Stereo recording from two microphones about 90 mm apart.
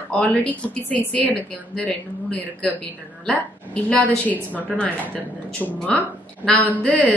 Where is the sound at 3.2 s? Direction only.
10° left (ahead or behind).